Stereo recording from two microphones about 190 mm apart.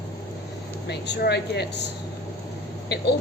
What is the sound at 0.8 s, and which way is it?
A woman's voice, 60° left (ahead or behind).